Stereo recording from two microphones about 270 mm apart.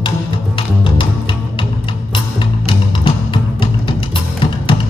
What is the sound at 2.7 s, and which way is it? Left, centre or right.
Music, centre.